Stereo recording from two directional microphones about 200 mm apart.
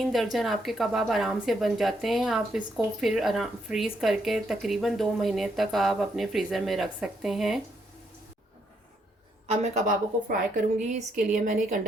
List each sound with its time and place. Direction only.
0.0 s a woman's voice: centre (ahead or behind)
9.5 s speech: 40° right (ahead or behind)